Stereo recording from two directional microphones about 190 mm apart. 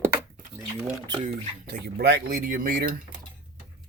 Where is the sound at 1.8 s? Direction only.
60° right (ahead or behind).